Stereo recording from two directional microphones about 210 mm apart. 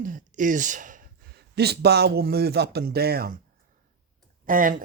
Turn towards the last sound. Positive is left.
turn(degrees=-40)  # may be behind; listen again after turning